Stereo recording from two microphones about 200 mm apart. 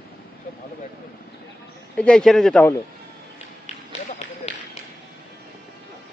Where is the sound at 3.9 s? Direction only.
35° left (ahead or behind).